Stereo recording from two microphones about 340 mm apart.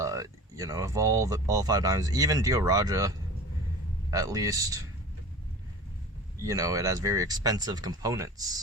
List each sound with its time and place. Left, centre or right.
0.0 s speech: centre
4.1 s speech: centre
6.4 s speech: centre